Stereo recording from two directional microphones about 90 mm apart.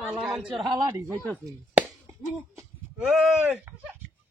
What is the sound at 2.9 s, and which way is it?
Speech, 5° right (ahead or behind).